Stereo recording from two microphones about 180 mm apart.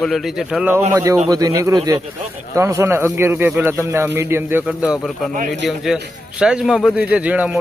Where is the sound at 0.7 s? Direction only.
15° right (ahead or behind).